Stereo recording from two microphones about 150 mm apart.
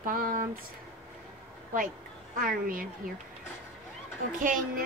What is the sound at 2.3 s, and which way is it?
Speech, 65° right (ahead or behind).